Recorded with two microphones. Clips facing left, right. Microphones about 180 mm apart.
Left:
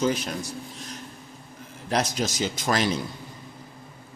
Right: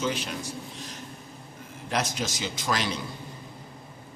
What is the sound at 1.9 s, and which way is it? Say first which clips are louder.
Speech: left 4 dB; 40° left (ahead or behind).